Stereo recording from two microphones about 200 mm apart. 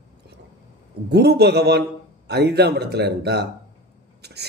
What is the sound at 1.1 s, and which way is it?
A man's voice, 55° right (ahead or behind).